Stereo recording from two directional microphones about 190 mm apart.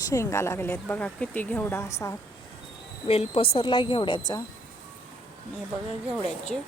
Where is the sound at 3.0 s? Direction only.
30° left (ahead or behind).